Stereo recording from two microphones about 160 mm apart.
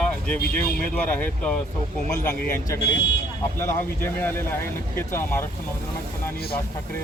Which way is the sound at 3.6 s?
15° left (ahead or behind).